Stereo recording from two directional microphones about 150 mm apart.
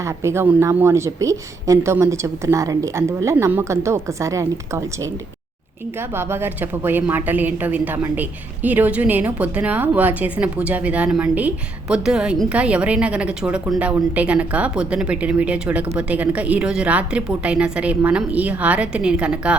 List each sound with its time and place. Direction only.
0.0 s speech: 20° right (ahead or behind)
6.0 s a woman's voice: 15° right (ahead or behind)